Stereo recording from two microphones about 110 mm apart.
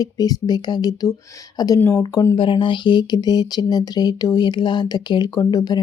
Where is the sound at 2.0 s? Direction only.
35° left (ahead or behind).